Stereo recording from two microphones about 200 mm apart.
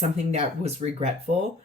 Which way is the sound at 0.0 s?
35° right (ahead or behind).